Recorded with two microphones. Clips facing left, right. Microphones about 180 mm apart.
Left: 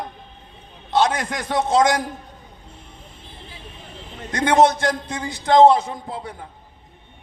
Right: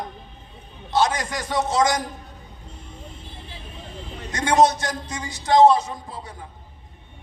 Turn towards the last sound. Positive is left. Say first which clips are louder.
# left 4 dB
turn(degrees=55)  # may be behind; listen again after turning